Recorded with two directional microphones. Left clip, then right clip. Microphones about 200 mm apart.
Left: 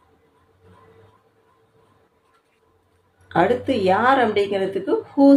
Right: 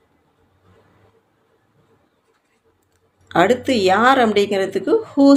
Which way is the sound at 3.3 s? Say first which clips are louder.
Right 3 dB; 55° right (ahead or behind).